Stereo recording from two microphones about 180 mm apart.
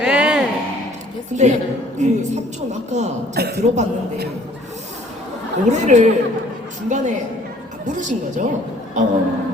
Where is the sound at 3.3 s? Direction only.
60° right (ahead or behind).